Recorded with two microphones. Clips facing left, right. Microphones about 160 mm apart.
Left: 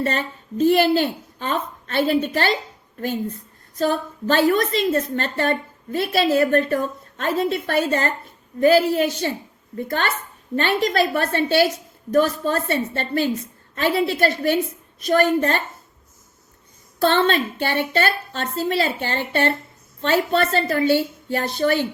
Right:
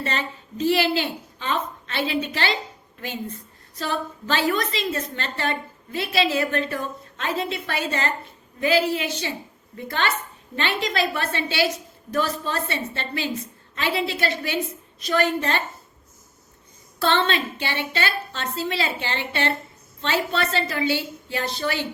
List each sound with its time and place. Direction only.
0.0 s a woman's voice: 50° left (ahead or behind)
3.8 s a woman's voice: 50° left (ahead or behind)
17.0 s a woman's voice: 50° left (ahead or behind)